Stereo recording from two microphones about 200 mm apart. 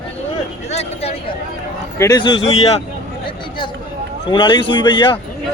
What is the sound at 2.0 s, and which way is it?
Speech, 20° left (ahead or behind).